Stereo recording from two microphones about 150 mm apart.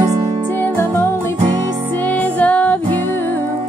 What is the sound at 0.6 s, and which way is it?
Music, 15° left (ahead or behind).